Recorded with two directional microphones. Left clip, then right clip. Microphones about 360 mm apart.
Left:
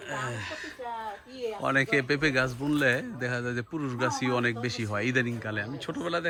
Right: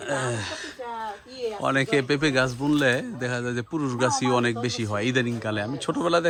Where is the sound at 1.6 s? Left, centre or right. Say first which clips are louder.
Right 2 dB; centre.